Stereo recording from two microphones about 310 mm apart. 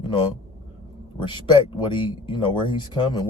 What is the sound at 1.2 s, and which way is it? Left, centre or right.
Speech, centre.